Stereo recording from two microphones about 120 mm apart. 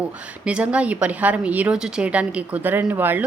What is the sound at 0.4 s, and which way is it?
A woman's voice, 10° right (ahead or behind).